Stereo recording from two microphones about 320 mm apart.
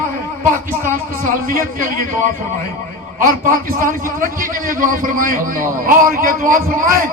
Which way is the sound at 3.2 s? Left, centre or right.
Right.